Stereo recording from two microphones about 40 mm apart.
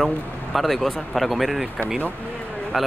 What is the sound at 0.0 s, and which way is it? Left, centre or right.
Speech, centre.